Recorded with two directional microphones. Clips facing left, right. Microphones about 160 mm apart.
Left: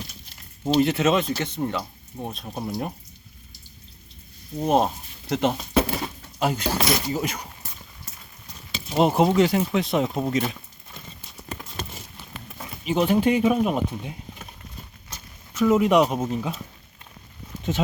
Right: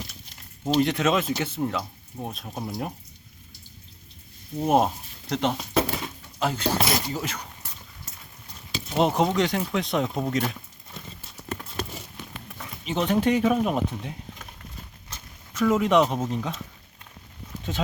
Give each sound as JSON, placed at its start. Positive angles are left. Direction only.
{"t": 0.6, "sound": "speech", "side_deg": 5}
{"t": 4.6, "sound": "speech", "side_deg": -5}
{"t": 5.2, "sound": "speech", "side_deg": 5}
{"t": 8.9, "sound": "speech", "side_deg": 5}
{"t": 12.8, "sound": "speech", "side_deg": 5}
{"t": 15.5, "sound": "speech", "side_deg": 5}
{"t": 17.6, "sound": "speech", "side_deg": 20}